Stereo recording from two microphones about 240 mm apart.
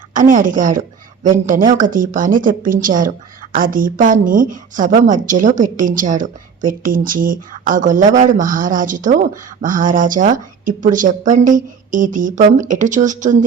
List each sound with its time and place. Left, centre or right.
0.1 s a woman's voice: right